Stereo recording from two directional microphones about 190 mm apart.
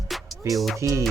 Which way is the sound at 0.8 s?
15° right (ahead or behind).